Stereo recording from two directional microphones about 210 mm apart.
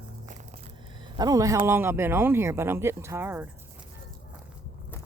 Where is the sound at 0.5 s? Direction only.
25° right (ahead or behind); by 3.9 s 10° right (ahead or behind).